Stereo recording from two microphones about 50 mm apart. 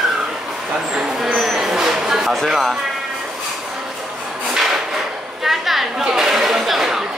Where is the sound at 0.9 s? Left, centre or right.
Centre.